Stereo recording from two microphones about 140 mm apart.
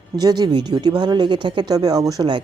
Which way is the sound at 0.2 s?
30° right (ahead or behind).